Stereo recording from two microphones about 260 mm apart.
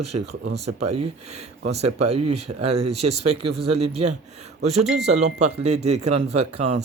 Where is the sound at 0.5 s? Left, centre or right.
Right.